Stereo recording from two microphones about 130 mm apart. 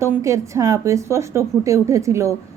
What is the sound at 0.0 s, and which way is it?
A woman's voice, 20° right (ahead or behind).